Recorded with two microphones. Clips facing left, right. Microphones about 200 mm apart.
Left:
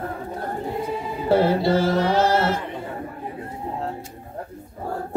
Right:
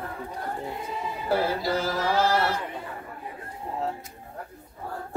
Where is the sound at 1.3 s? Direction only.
25° left (ahead or behind).